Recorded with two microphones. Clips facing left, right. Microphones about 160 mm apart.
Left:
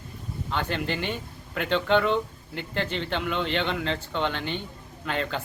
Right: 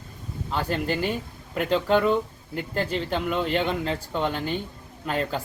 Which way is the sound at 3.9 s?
5° right (ahead or behind).